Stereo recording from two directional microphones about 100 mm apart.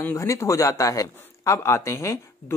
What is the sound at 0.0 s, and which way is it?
A woman's voice, 30° left (ahead or behind).